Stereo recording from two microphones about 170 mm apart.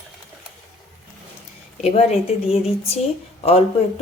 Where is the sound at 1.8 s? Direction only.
40° left (ahead or behind).